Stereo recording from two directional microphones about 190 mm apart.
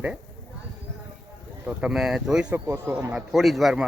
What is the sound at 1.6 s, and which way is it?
Speech, 5° right (ahead or behind).